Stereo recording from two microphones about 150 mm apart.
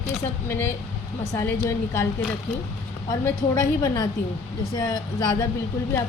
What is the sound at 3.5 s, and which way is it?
A woman's voice, 25° left (ahead or behind).